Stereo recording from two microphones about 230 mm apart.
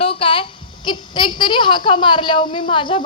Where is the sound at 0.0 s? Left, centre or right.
Left.